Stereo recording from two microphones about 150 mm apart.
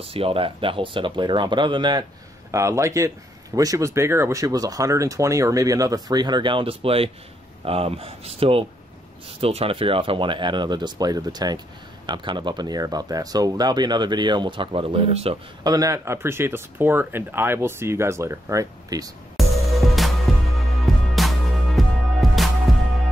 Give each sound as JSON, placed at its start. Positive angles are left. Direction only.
{"t": 0.0, "sound": "speech", "side_deg": -40}
{"t": 2.5, "sound": "speech", "side_deg": -20}
{"t": 15.6, "sound": "speech", "side_deg": -25}
{"t": 19.3, "sound": "music", "side_deg": 0}